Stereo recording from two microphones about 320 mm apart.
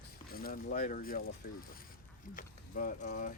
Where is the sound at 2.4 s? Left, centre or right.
Left.